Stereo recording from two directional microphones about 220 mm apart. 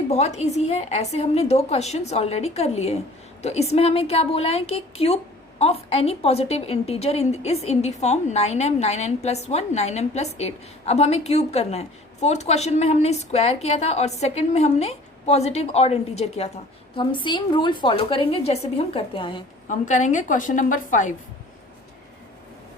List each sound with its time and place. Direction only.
0.1 s a woman's voice: 30° left (ahead or behind)
19.6 s a woman's voice: 35° left (ahead or behind)